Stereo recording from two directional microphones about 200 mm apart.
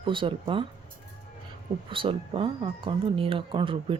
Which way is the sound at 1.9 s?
25° right (ahead or behind).